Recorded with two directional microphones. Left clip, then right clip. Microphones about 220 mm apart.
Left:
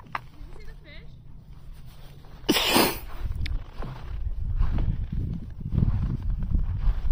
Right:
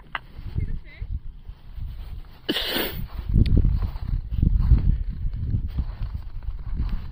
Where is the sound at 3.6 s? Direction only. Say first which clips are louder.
Right 3 dB; 50° right (ahead or behind).